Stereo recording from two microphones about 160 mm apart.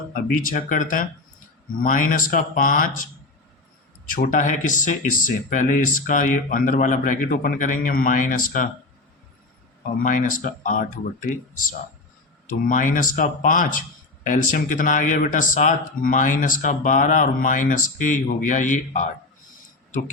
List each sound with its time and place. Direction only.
0.1 s speech: 60° left (ahead or behind)
4.1 s speech: 55° left (ahead or behind)
10.0 s speech: 55° left (ahead or behind)
12.5 s speech: 55° left (ahead or behind)